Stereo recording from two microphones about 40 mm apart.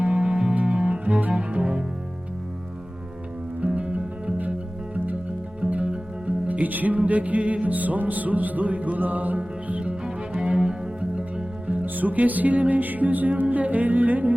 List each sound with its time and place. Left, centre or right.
0.0 s music: right
1.3 s cello: right
3.8 s music: right
5.5 s music: right
10.4 s music: right
11.7 s music: right